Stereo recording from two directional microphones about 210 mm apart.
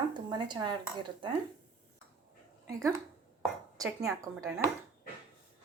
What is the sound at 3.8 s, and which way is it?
Speech, 15° right (ahead or behind).